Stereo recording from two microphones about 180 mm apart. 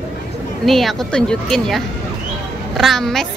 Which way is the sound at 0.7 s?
Centre (ahead or behind).